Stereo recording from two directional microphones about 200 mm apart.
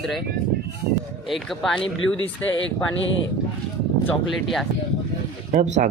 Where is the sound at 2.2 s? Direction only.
70° left (ahead or behind).